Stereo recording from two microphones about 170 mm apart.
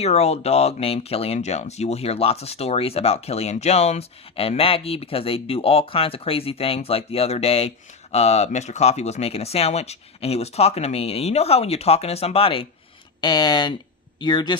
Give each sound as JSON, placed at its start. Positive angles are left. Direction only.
{"t": 0.0, "sound": "speech", "side_deg": 35}